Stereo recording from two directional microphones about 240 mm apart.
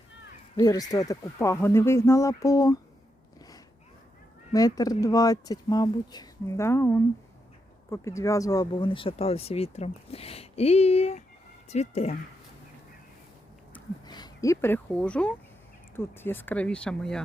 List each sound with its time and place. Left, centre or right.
0.5 s speech: centre
4.5 s speech: centre
14.1 s speech: centre